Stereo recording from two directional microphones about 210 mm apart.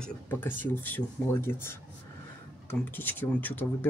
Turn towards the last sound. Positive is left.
turn(degrees=10)  # may be behind; listen again after turning